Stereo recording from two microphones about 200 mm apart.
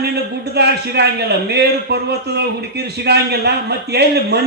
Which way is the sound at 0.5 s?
55° right (ahead or behind).